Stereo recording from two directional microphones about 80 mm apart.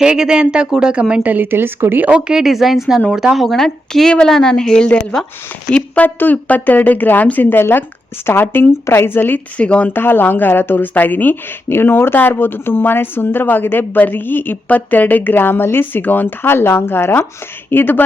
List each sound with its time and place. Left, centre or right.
0.0 s a woman's voice: centre
1.2 s a woman's voice: right
2.0 s speech: centre
9.9 s speech: left